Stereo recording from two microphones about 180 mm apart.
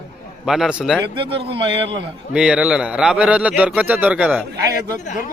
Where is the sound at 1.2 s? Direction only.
30° right (ahead or behind).